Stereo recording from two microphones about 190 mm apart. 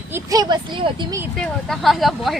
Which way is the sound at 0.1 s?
20° right (ahead or behind).